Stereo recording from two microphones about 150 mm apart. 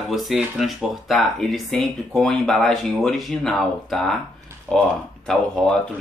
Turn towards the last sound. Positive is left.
turn(degrees=5)  # may be behind; listen again after turning